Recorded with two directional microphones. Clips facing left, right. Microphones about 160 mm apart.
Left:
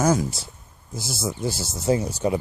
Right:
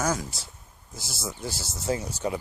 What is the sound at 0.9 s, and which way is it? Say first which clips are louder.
Speech: left 8 dB; 10° left (ahead or behind).